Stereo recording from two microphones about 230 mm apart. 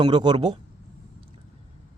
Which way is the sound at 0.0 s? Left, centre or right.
Centre.